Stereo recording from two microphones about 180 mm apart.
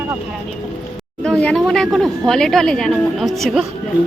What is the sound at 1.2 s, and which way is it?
A woman's voice, 5° left (ahead or behind).